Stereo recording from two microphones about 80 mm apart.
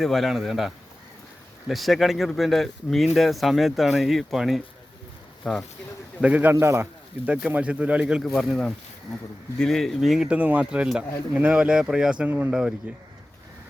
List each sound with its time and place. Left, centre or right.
0.0 s speech: centre
6.2 s speech: centre
6.5 s a man's voice: right
7.3 s speech: centre
8.2 s speech: centre
10.2 s speech: centre